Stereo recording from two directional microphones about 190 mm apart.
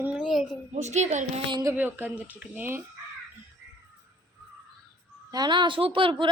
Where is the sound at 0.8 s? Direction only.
35° right (ahead or behind).